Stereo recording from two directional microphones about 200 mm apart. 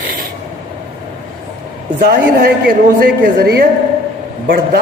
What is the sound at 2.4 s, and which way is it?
A woman's voice, 45° right (ahead or behind).